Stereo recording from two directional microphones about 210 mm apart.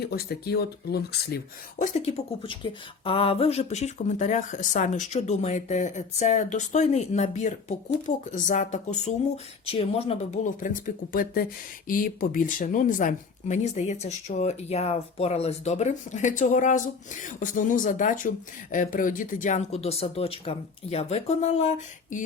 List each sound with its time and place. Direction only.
0.0 s speech: 50° left (ahead or behind)
1.8 s speech: 35° left (ahead or behind)